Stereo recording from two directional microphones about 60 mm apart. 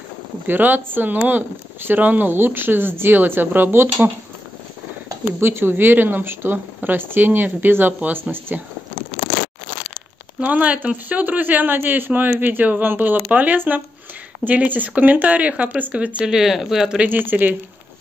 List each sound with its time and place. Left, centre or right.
0.5 s speech: right
5.4 s speech: right
10.4 s speech: right
16.3 s speech: centre
17.1 s speech: right